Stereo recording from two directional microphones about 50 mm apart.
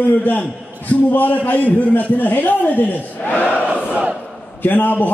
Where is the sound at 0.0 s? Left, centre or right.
Left.